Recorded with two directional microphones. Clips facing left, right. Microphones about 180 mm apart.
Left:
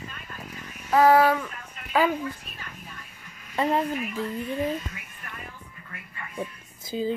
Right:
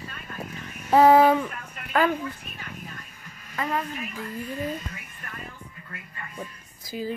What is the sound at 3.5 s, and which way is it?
Speech, 30° left (ahead or behind).